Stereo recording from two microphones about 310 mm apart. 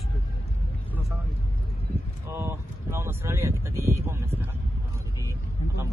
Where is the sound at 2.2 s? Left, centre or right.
Centre.